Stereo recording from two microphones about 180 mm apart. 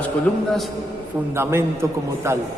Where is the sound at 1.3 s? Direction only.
15° right (ahead or behind).